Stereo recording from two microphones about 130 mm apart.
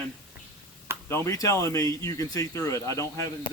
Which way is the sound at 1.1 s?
20° left (ahead or behind).